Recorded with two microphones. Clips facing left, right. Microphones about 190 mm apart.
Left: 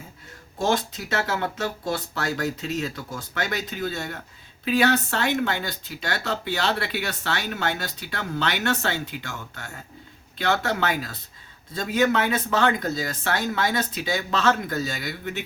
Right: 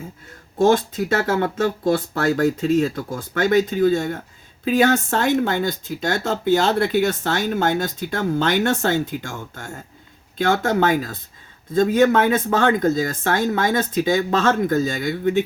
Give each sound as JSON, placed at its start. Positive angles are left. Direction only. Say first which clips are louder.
{"t": 0.6, "sound": "speech", "louder": "right 8 dB", "side_deg": -50}